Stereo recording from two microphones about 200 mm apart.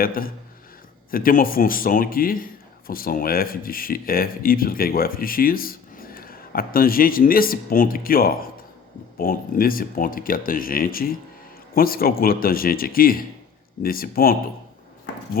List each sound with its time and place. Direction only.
0.0 s a man's voice: 45° left (ahead or behind)